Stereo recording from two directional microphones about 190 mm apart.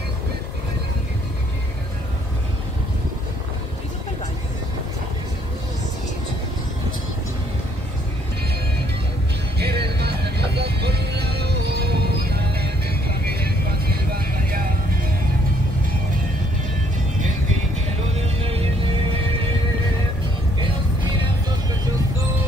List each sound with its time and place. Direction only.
9.6 s music: 60° right (ahead or behind)
13.4 s vehicle: 50° right (ahead or behind)